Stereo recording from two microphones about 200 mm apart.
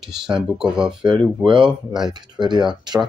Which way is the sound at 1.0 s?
25° right (ahead or behind).